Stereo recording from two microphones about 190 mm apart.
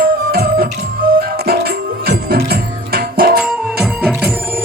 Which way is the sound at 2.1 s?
55° right (ahead or behind).